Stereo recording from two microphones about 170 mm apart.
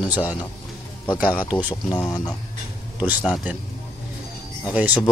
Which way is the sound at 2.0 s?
20° left (ahead or behind).